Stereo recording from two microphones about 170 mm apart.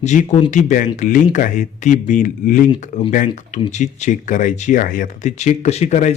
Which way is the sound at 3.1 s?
50° left (ahead or behind).